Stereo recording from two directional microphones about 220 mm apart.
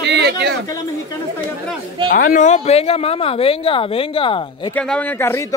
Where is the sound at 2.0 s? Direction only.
40° left (ahead or behind); by 4.7 s 25° left (ahead or behind).